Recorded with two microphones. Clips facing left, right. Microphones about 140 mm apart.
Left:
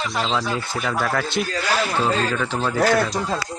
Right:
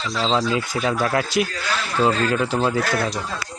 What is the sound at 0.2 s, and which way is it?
Speech, 30° right (ahead or behind).